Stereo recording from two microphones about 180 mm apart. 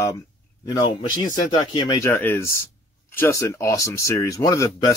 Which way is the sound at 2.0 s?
10° left (ahead or behind).